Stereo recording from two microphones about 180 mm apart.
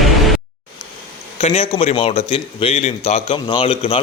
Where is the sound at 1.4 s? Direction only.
35° left (ahead or behind).